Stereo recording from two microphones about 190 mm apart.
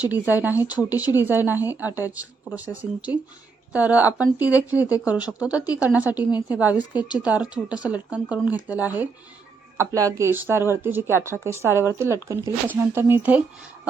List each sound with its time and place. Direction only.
0.1 s speech: 10° right (ahead or behind)
3.1 s speech: 25° left (ahead or behind)
3.7 s speech: 5° right (ahead or behind)